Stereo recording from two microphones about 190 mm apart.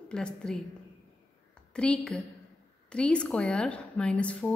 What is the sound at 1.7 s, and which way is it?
A woman's voice, 5° left (ahead or behind).